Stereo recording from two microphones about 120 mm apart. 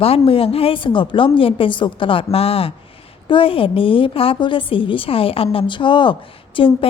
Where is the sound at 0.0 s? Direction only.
55° left (ahead or behind).